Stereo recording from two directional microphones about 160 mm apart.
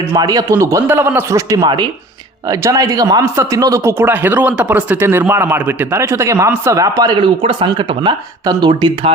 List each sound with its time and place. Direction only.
0.1 s a man's voice: 25° right (ahead or behind)